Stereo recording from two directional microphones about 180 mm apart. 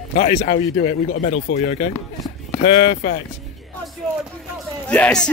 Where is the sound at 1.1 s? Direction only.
70° left (ahead or behind).